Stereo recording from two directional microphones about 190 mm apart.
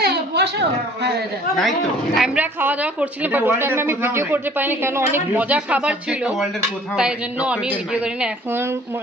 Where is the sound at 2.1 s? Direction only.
5° right (ahead or behind).